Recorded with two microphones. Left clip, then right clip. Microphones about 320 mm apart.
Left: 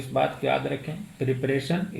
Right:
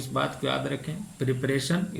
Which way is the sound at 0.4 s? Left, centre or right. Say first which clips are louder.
Left 4 dB; centre.